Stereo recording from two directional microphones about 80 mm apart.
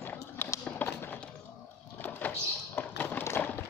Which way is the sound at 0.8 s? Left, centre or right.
Left.